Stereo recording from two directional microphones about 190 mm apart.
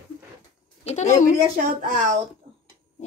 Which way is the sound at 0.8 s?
40° left (ahead or behind).